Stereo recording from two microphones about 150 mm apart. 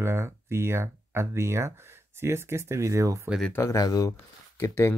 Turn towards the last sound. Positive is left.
turn(degrees=20)  # may be behind; listen again after turning